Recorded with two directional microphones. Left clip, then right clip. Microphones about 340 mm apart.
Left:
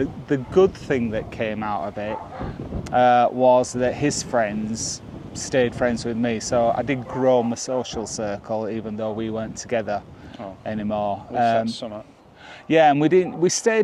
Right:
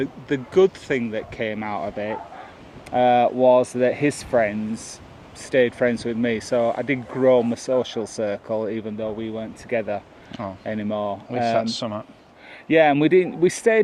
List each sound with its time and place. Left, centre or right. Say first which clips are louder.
0.0 s speech: left 1 dB; left
2.9 s speech: left 1 dB; left
4.7 s speech: left 5 dB; left
5.5 s speech: right 2 dB; left
11.3 s speech: left 2 dB; right
11.8 s speech: right 4 dB; right
12.6 s a man's voice: even; left